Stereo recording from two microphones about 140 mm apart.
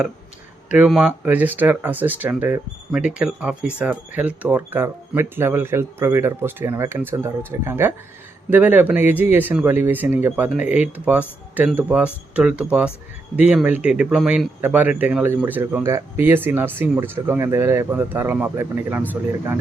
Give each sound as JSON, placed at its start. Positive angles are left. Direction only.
{"t": 0.7, "sound": "speech", "side_deg": -5}